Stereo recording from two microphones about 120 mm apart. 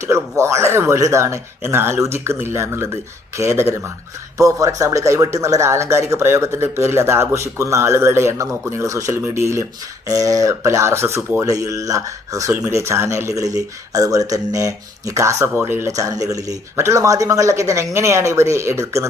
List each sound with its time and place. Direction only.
0.0 s speech: 25° right (ahead or behind)